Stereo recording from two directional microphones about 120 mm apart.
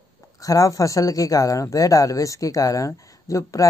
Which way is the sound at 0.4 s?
30° left (ahead or behind).